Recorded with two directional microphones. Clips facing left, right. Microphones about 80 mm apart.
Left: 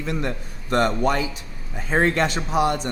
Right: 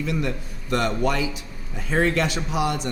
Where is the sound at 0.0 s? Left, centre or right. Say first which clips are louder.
Right 1 dB; left.